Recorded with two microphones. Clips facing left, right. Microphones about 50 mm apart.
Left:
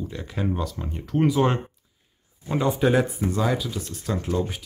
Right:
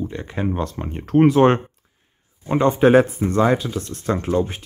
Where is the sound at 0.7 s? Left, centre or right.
Right.